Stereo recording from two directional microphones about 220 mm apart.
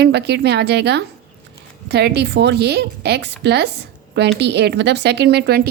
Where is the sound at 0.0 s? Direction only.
50° right (ahead or behind).